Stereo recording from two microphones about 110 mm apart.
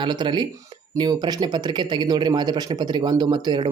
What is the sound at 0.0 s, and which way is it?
Speech, 45° right (ahead or behind).